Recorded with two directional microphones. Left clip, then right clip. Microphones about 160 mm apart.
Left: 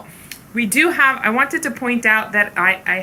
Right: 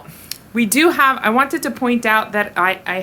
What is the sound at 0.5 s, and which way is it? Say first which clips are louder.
A woman's voice: right 1 dB; 35° right (ahead or behind).